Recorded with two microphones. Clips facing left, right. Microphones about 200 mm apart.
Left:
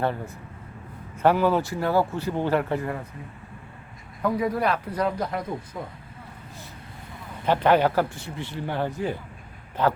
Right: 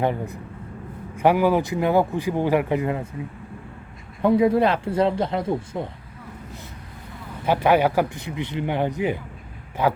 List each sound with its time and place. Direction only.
0.0 s speech: 15° right (ahead or behind)
4.2 s speech: 25° right (ahead or behind)
7.4 s speech: 10° right (ahead or behind)